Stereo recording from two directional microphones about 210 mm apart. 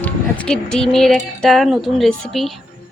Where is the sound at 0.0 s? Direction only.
5° left (ahead or behind).